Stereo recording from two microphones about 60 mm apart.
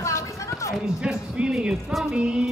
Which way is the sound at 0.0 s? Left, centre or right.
Left.